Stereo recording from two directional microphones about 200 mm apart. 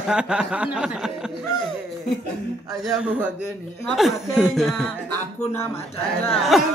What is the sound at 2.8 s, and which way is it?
A man's voice, 5° right (ahead or behind).